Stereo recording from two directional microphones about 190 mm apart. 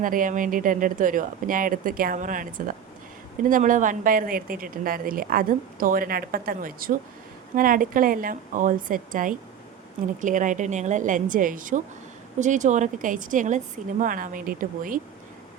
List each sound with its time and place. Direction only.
0.0 s a woman's voice: 45° right (ahead or behind)